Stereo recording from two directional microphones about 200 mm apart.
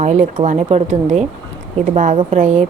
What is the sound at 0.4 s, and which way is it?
A woman's voice, 35° right (ahead or behind).